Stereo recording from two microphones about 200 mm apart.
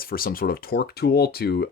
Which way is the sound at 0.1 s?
45° left (ahead or behind).